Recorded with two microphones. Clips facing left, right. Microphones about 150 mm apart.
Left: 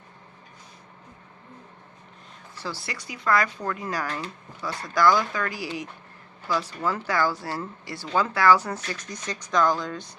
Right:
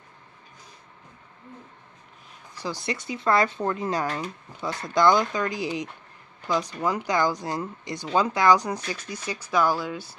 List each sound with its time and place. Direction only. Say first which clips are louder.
2.6 s speech: right 4 dB; 15° right (ahead or behind)